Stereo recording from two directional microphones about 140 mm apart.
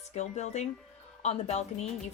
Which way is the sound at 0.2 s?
55° left (ahead or behind).